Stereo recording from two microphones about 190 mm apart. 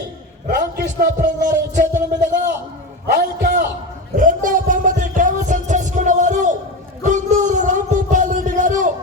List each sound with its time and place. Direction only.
0.4 s a man's voice: 50° right (ahead or behind)
3.1 s a man's voice: 55° right (ahead or behind)
4.2 s music: 45° right (ahead or behind)